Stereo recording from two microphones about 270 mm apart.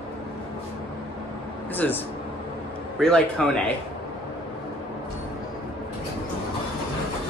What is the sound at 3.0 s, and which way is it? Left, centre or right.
Speech, centre.